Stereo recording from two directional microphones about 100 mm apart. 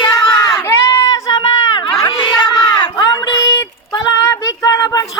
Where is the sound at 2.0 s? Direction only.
45° left (ahead or behind).